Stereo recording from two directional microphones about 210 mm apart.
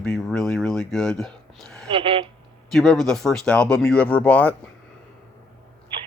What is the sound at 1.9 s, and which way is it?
Speech, 25° right (ahead or behind).